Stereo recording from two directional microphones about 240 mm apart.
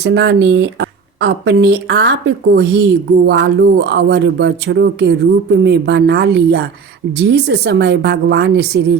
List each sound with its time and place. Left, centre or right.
0.0 s speech: right